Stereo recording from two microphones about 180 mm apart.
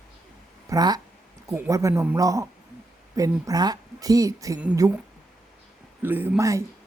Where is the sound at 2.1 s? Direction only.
20° right (ahead or behind).